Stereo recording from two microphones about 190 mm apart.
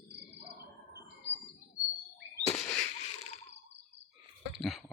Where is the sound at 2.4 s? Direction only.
35° left (ahead or behind).